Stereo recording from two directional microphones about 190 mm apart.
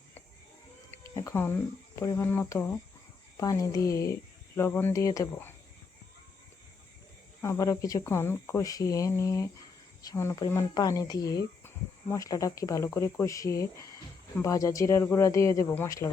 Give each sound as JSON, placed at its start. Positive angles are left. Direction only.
{"t": 0.9, "sound": "music", "side_deg": 15}
{"t": 2.0, "sound": "speech", "side_deg": 15}
{"t": 7.4, "sound": "speech", "side_deg": 15}